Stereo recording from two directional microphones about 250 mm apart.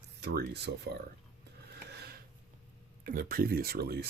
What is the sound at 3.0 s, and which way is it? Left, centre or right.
Speech, right.